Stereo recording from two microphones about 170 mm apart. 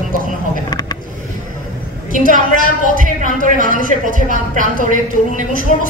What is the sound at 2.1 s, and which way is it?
Speech, 55° left (ahead or behind).